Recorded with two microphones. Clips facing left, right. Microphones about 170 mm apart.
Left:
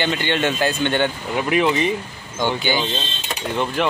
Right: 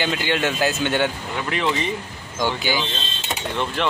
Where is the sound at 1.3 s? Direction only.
10° left (ahead or behind).